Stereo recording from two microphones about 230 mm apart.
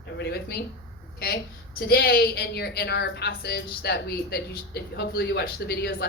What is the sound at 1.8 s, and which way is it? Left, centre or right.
A woman's voice, left.